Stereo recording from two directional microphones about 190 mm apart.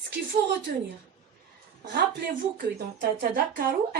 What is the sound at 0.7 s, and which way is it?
Speech, 50° right (ahead or behind).